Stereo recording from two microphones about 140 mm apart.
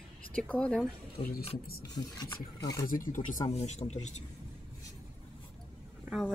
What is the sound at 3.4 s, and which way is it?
Speech, 50° left (ahead or behind).